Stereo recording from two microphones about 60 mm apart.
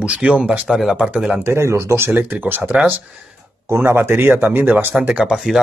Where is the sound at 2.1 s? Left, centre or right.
Right.